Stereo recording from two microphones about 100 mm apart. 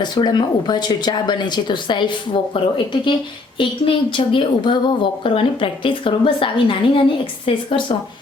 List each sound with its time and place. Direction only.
0.0 s a woman's voice: 50° left (ahead or behind); by 7.9 s 65° left (ahead or behind)